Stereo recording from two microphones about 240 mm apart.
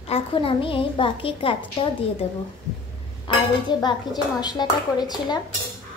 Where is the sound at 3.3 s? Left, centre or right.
Left.